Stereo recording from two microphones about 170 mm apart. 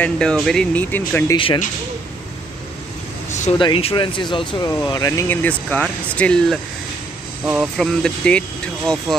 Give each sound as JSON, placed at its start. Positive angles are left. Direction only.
{"t": 0.0, "sound": "speech", "side_deg": 5}
{"t": 1.3, "sound": "speech", "side_deg": 30}
{"t": 3.3, "sound": "air conditioning", "side_deg": 45}
{"t": 3.5, "sound": "speech", "side_deg": 30}
{"t": 7.4, "sound": "speech", "side_deg": -5}